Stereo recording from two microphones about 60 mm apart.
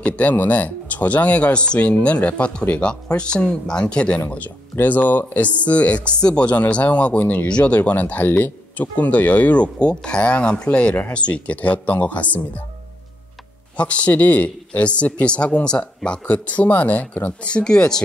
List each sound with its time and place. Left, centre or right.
0.0 s speech: left
4.7 s speech: left
13.7 s speech: left